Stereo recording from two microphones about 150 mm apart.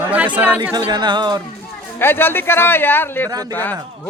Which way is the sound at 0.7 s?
30° right (ahead or behind).